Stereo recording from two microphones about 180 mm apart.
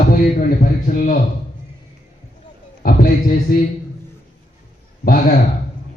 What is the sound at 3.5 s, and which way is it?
Speech, 55° left (ahead or behind).